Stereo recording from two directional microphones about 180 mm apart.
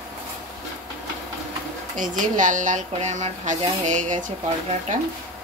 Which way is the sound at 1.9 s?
45° right (ahead or behind).